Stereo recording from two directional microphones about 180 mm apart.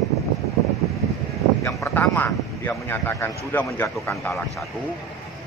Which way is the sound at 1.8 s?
5° left (ahead or behind).